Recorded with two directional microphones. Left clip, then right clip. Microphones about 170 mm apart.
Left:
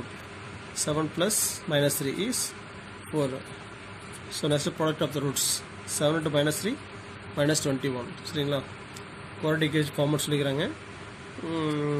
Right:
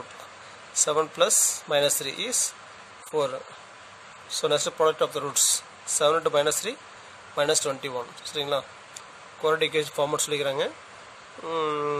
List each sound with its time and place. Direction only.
0.8 s speech: 60° right (ahead or behind)
4.3 s speech: 60° right (ahead or behind)